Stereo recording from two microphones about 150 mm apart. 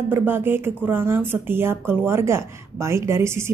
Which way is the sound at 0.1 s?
15° right (ahead or behind).